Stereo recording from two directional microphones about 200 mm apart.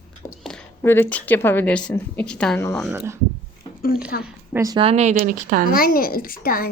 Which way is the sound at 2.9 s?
10° right (ahead or behind).